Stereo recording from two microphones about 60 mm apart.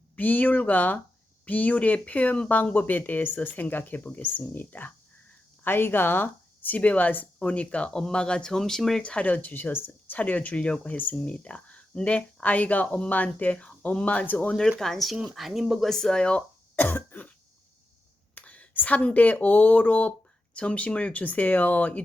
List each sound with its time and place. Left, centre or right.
0.2 s speech: left; by 9.0 s centre
9.0 s speech: centre; by 10.2 s left
10.2 s speech: left
14.8 s a woman's voice: centre
15.9 s speech: centre
16.7 s cough: left
18.3 s speech: left